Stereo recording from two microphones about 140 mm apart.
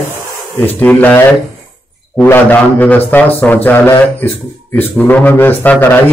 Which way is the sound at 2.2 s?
15° left (ahead or behind).